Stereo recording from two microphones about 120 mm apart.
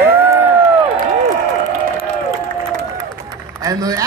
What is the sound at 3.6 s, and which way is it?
Speech, 30° right (ahead or behind).